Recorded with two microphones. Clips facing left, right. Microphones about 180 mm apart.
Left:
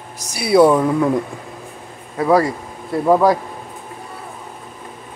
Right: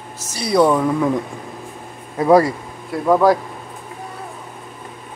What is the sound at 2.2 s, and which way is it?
Speech, 20° right (ahead or behind).